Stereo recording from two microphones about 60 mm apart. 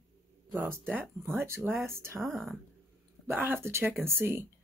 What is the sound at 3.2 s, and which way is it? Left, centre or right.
Speech, right.